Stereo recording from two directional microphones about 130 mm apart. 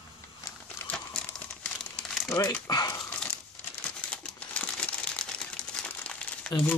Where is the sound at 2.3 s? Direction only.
25° left (ahead or behind).